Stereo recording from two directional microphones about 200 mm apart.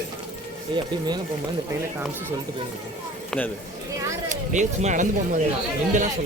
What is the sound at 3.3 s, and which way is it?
Speech, 5° left (ahead or behind).